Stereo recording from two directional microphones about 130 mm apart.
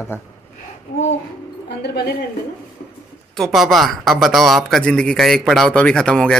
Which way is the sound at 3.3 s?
Centre (ahead or behind).